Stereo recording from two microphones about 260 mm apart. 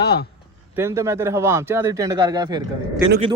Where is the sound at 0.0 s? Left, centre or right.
Left.